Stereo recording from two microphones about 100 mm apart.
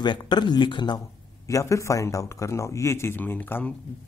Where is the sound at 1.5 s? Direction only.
30° left (ahead or behind).